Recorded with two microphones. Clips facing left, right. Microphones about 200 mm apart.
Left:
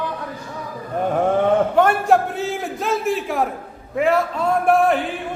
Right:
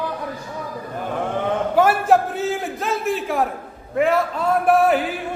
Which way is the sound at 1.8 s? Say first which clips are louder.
Right 4 dB; 5° right (ahead or behind).